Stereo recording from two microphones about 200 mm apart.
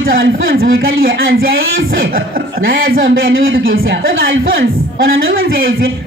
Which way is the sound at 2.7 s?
80° right.